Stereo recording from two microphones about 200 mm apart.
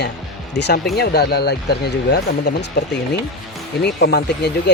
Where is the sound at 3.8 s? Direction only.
55° left (ahead or behind).